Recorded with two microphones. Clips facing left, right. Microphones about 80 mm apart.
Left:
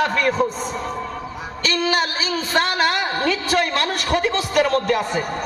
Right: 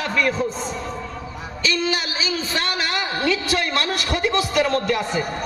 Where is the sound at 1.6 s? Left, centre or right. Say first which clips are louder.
Left 3 dB; left.